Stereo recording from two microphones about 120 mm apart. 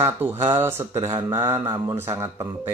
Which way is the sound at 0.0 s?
20° right (ahead or behind).